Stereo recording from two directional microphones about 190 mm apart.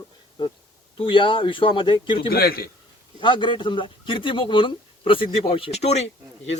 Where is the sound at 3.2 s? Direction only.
25° left (ahead or behind).